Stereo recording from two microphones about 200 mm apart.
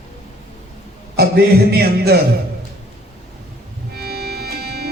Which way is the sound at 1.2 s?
50° right (ahead or behind).